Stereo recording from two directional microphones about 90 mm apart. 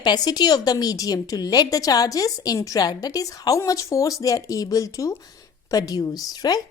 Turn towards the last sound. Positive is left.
turn(degrees=45)  # may be behind; listen again after turning